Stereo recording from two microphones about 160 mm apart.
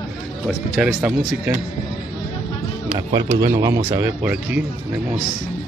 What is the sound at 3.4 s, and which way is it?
Speech, 20° right (ahead or behind).